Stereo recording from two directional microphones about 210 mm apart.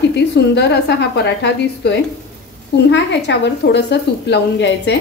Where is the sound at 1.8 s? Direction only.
55° left (ahead or behind).